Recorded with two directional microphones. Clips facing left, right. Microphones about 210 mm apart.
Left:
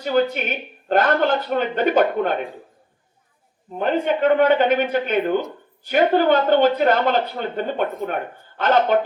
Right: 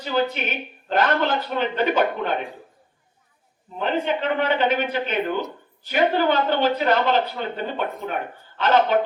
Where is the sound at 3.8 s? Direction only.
50° left (ahead or behind).